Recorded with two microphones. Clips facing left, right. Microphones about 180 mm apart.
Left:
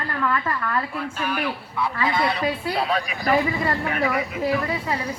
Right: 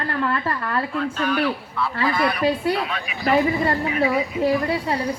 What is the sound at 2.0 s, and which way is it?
Speech, 25° left (ahead or behind).